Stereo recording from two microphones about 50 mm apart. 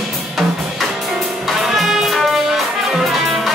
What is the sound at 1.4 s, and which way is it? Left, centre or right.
Music, centre.